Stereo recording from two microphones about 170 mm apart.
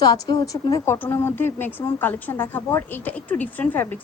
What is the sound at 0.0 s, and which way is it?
A woman's voice, 25° left (ahead or behind).